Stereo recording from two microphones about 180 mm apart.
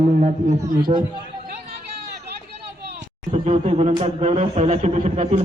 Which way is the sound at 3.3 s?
35° right (ahead or behind).